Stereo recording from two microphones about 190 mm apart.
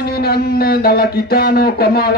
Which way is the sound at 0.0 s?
55° left (ahead or behind).